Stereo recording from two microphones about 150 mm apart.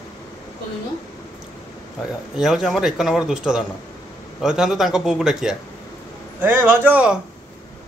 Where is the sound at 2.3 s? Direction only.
5° right (ahead or behind).